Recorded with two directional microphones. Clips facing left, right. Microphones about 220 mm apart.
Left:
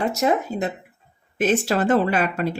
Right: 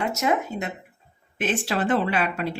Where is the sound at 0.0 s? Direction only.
35° left (ahead or behind).